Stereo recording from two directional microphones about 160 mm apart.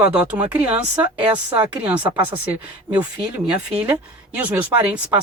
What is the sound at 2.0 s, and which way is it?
Speech, 30° right (ahead or behind).